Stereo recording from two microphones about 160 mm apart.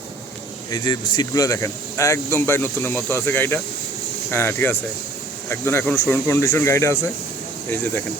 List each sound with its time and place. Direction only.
0.7 s speech: 25° left (ahead or behind)